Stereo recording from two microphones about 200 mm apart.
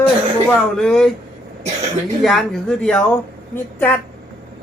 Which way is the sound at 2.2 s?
Centre (ahead or behind).